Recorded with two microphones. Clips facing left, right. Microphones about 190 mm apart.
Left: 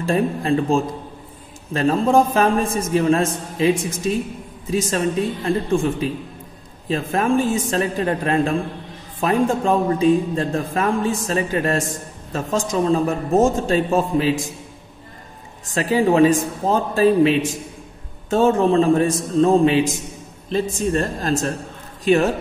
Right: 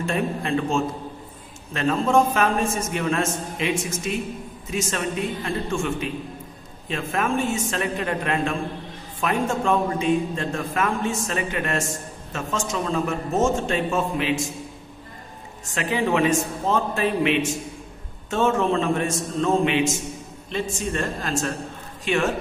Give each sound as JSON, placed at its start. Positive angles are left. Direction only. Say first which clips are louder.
{"t": 0.0, "sound": "a man's voice", "louder": "left 5 dB", "side_deg": 35}
{"t": 15.7, "sound": "a man's voice", "louder": "left 6 dB", "side_deg": 35}